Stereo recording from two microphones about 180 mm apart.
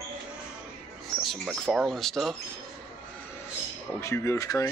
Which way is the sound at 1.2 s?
Centre (ahead or behind).